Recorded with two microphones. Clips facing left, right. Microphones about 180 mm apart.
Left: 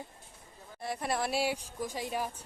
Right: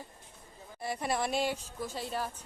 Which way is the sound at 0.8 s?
Centre (ahead or behind).